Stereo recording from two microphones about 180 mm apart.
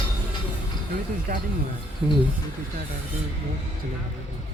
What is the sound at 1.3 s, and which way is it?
Speech, 55° right (ahead or behind).